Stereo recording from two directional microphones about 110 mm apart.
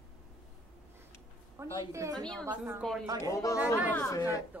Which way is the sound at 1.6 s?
25° right (ahead or behind).